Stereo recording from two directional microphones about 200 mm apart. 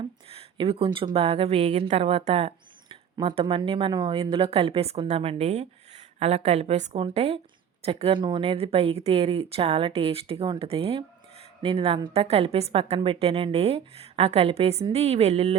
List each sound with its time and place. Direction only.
0.0 s a woman's voice: 30° right (ahead or behind)